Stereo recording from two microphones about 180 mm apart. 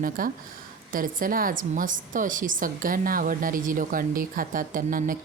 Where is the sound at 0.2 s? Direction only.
50° right (ahead or behind).